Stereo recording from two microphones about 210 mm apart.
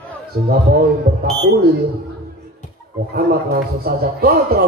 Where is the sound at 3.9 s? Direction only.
45° right (ahead or behind).